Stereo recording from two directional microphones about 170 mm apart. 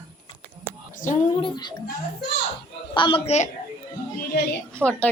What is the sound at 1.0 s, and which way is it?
Speech, 50° left (ahead or behind).